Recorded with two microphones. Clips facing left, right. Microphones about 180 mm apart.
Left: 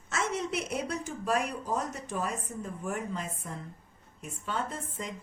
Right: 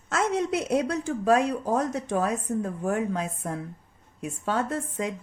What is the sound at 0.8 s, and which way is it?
A woman's voice, 75° right (ahead or behind).